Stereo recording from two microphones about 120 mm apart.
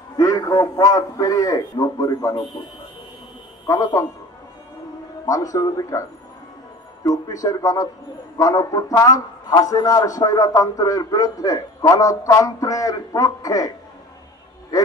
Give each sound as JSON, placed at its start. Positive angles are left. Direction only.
{"t": 0.2, "sound": "a man's voice", "side_deg": 30}
{"t": 3.6, "sound": "a man's voice", "side_deg": 30}
{"t": 5.2, "sound": "a man's voice", "side_deg": 30}
{"t": 7.1, "sound": "a man's voice", "side_deg": 30}